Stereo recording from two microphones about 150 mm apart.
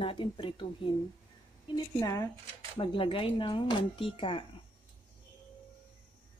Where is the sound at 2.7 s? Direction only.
35° left (ahead or behind).